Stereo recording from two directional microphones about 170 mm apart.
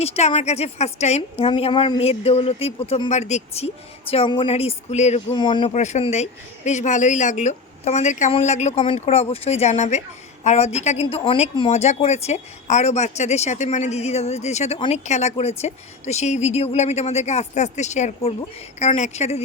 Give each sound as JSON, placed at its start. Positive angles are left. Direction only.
{"t": 0.0, "sound": "speech", "side_deg": 40}
{"t": 5.3, "sound": "speech", "side_deg": 25}
{"t": 5.7, "sound": "speech", "side_deg": 45}